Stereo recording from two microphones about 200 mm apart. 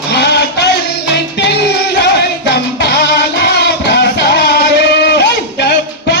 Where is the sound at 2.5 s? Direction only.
55° left (ahead or behind).